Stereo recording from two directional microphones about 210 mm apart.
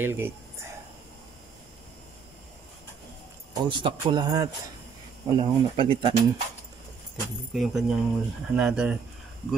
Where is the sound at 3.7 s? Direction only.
20° right (ahead or behind).